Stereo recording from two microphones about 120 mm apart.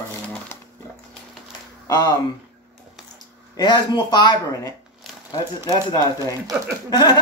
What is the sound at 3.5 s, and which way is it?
Speech, 35° left (ahead or behind).